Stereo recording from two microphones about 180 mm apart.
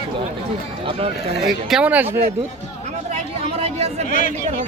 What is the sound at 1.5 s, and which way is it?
Speech, centre (ahead or behind).